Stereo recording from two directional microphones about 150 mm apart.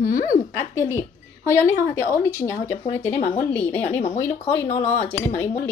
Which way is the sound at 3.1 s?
35° left (ahead or behind).